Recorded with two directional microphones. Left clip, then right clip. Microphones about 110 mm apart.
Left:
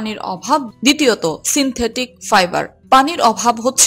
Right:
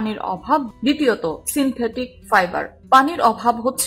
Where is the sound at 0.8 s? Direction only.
25° left (ahead or behind).